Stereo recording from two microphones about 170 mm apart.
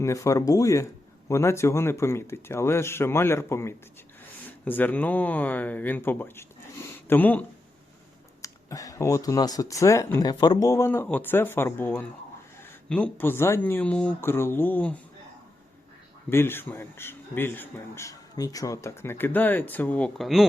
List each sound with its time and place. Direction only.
0.0 s a man's voice: 20° left (ahead or behind)
16.3 s a man's voice: 15° left (ahead or behind)